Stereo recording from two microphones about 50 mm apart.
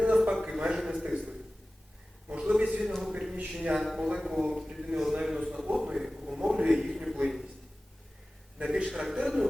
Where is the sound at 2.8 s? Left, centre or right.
Centre.